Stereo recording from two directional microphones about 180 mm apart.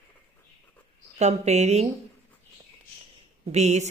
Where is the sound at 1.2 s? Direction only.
40° right (ahead or behind).